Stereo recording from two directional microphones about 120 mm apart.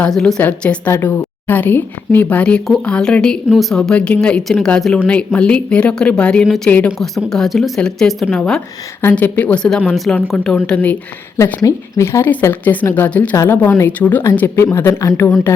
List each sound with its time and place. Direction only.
0.0 s a woman's voice: 5° left (ahead or behind)
7.0 s speech: 5° left (ahead or behind)
9.0 s a woman's voice: 15° left (ahead or behind)
11.6 s a woman's voice: 25° left (ahead or behind)